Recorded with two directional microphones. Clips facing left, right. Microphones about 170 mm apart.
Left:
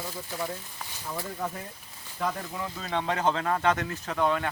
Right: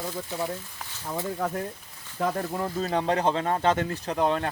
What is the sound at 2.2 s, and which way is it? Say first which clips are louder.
Speech: right 4 dB; 45° right (ahead or behind).